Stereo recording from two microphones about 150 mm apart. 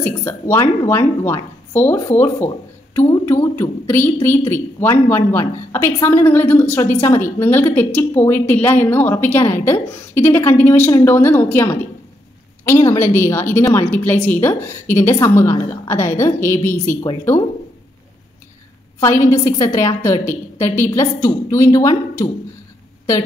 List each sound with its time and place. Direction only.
0.2 s a woman's voice: 15° left (ahead or behind)
18.9 s a woman's voice: 20° left (ahead or behind)